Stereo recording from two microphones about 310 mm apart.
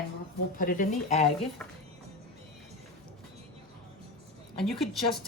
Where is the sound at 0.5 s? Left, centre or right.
Left.